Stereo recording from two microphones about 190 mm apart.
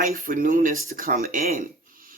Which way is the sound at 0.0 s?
50° right (ahead or behind).